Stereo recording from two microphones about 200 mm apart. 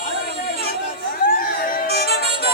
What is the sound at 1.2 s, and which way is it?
Music, 45° left (ahead or behind).